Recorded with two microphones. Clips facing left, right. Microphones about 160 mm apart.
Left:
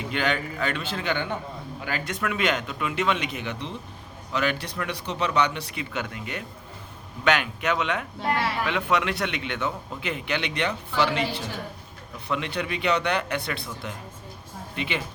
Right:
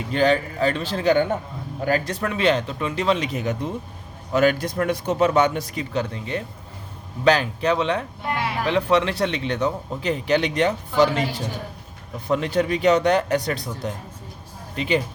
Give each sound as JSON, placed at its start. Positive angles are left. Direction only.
{"t": 0.1, "sound": "a man's voice", "side_deg": -35}